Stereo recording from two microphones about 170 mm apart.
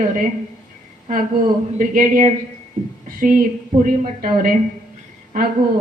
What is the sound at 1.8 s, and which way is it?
Speech, 55° right (ahead or behind).